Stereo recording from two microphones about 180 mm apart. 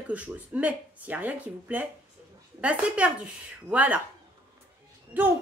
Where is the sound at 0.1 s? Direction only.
10° right (ahead or behind).